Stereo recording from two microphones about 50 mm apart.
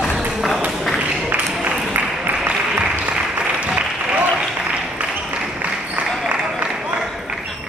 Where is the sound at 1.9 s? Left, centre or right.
Right.